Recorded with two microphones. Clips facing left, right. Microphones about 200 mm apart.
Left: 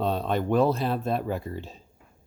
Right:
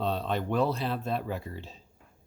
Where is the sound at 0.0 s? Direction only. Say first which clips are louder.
Left 4 dB; 50° left (ahead or behind).